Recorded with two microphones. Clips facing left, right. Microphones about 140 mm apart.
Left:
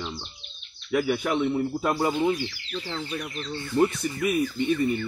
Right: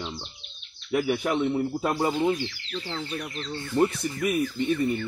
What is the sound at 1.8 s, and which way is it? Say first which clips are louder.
Speech: left 1 dB; 15° right (ahead or behind).